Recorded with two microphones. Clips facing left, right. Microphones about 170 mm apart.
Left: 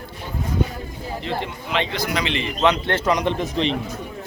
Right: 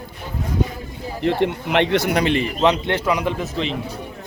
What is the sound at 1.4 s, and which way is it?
Speech, 65° right (ahead or behind).